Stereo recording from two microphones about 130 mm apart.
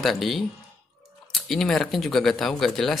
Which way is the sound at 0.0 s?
Centre (ahead or behind).